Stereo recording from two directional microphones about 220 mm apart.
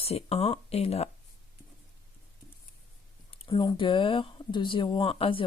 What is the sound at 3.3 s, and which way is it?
Speech, 25° left (ahead or behind).